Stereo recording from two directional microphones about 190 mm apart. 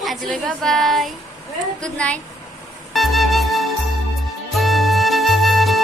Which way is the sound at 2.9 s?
Centre (ahead or behind).